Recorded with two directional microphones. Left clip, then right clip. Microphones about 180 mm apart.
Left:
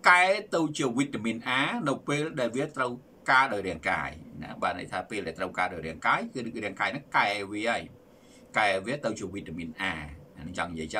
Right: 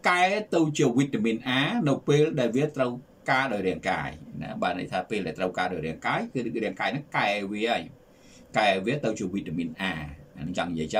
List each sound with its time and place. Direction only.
0.0 s speech: 15° right (ahead or behind)